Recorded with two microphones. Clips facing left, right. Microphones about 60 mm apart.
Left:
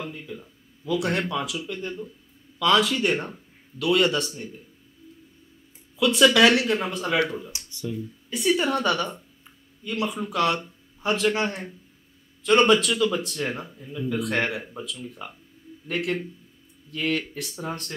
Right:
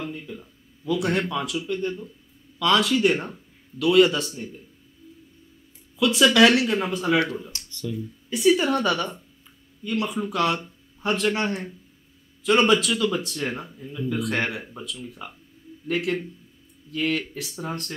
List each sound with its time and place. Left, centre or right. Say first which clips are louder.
0.0 s speech: right 1 dB; centre
5.9 s speech: even; centre
7.5 s speech: even; centre
7.9 s speech: right 2 dB; centre